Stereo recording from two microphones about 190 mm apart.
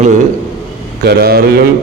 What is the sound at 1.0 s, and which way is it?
Speech, 55° right (ahead or behind).